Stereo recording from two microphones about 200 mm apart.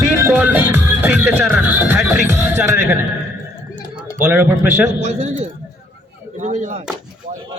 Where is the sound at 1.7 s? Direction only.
10° right (ahead or behind).